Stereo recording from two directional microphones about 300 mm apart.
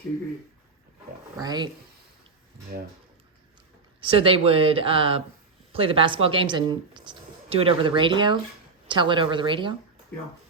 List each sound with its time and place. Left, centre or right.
1.4 s speech: centre
4.0 s speech: centre